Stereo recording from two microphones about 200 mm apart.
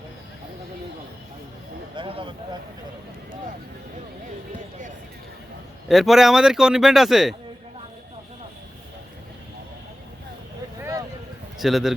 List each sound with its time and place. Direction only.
2.0 s speech: 25° right (ahead or behind)
5.9 s speech: centre (ahead or behind)
10.8 s a sound: 15° right (ahead or behind)
11.6 s speech: centre (ahead or behind)